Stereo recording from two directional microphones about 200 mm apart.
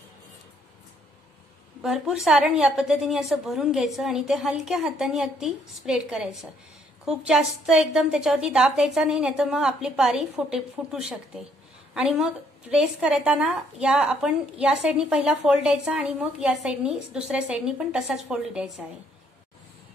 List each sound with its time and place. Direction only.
1.8 s a woman's voice: 5° right (ahead or behind)